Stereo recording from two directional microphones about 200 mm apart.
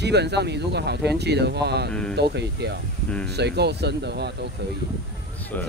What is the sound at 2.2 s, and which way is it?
Speech, 55° right (ahead or behind).